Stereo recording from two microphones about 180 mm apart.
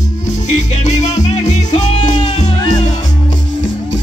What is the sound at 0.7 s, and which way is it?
Music, 40° left (ahead or behind).